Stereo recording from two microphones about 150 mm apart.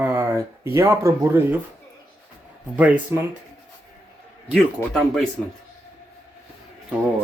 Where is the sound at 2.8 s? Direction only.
10° right (ahead or behind).